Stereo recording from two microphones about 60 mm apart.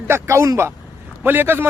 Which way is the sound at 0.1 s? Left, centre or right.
Right.